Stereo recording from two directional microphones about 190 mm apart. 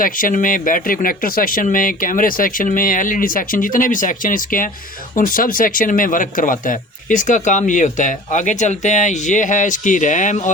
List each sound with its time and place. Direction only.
0.0 s speech: 45° left (ahead or behind)